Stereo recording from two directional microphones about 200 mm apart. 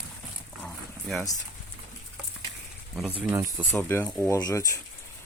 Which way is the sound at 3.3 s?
15° right (ahead or behind).